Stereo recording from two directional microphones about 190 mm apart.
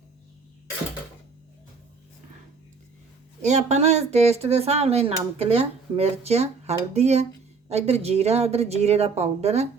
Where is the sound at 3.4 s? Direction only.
35° right (ahead or behind).